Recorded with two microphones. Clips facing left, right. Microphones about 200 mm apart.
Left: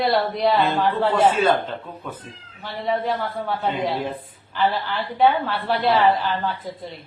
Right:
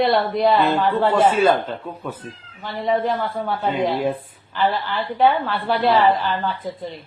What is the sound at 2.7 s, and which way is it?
A woman's voice, centre (ahead or behind).